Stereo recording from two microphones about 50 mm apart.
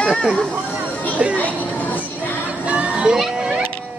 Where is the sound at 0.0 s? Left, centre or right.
Centre.